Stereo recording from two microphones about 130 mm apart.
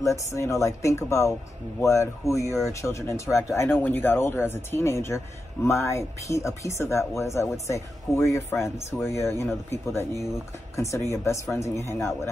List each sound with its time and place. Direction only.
0.0 s a man's voice: 25° left (ahead or behind)